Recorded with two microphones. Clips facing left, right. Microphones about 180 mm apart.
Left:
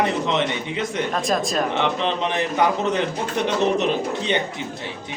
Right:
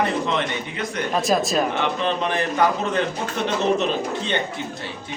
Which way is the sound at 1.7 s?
20° left (ahead or behind).